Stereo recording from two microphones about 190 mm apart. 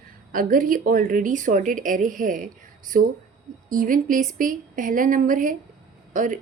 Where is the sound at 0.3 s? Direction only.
45° right (ahead or behind).